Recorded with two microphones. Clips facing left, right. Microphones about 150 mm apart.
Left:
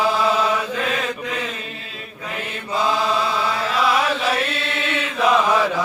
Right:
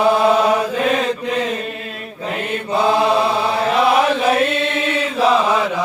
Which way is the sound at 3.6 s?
55° right (ahead or behind).